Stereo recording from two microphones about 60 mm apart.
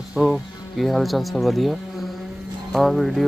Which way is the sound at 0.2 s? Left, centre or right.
Centre.